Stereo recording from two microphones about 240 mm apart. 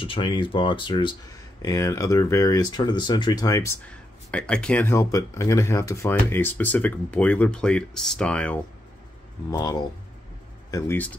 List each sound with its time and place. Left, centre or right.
0.0 s speech: left; by 8.5 s centre
9.5 s speech: centre